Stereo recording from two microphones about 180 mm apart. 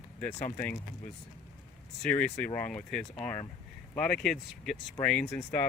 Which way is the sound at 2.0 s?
10° left (ahead or behind).